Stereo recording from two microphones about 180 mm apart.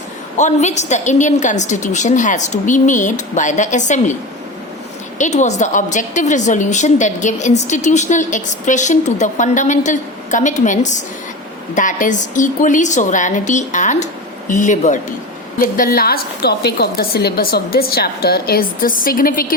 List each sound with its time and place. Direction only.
0.3 s a woman's voice: 40° left (ahead or behind)
5.1 s a woman's voice: 45° left (ahead or behind)